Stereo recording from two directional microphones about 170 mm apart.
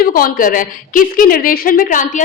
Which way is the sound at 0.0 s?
55° left (ahead or behind).